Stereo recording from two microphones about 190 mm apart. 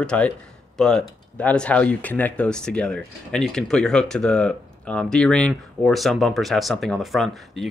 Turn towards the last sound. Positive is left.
turn(degrees=0)  # may be behind; listen again after turning